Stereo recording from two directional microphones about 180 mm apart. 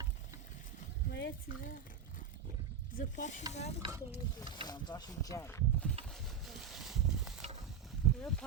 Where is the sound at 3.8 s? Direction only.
30° right (ahead or behind).